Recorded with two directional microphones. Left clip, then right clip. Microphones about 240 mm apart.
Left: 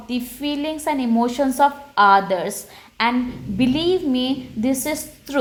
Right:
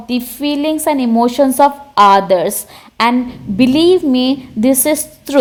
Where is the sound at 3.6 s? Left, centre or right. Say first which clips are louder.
Right 9 dB; right.